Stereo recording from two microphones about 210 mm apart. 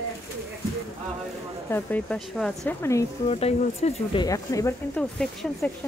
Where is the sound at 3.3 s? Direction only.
30° left (ahead or behind).